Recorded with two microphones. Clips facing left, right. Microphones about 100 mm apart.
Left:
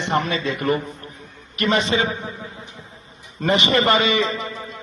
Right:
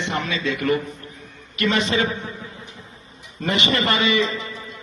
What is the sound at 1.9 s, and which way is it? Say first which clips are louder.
Speech: left 1 dB; 20° left (ahead or behind).